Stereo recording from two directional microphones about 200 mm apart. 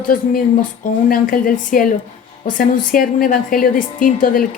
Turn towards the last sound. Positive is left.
turn(degrees=45)  # may be behind; listen again after turning